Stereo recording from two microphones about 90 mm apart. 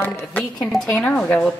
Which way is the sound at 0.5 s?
5° left (ahead or behind).